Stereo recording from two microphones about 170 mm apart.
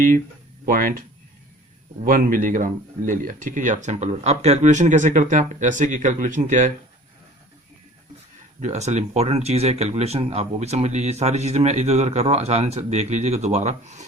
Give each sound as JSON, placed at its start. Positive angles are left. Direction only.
{"t": 0.7, "sound": "speech", "side_deg": -55}
{"t": 2.0, "sound": "speech", "side_deg": -55}
{"t": 8.6, "sound": "speech", "side_deg": -40}